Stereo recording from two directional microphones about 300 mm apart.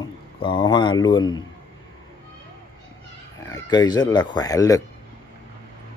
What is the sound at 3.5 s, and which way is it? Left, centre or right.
Speech, centre.